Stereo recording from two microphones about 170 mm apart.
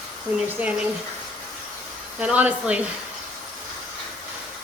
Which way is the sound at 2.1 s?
10° right (ahead or behind).